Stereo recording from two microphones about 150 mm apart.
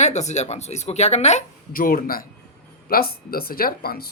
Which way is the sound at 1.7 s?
75° left (ahead or behind).